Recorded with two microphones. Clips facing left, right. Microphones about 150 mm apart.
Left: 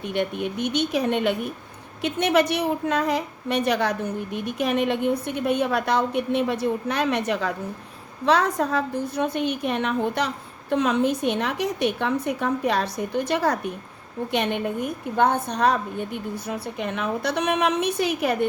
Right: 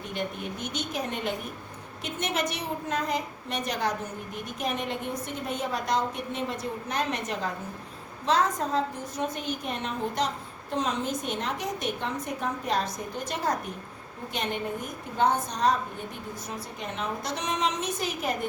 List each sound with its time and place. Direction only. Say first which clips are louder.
0.1 s a woman's voice: left 8 dB; 65° left (ahead or behind)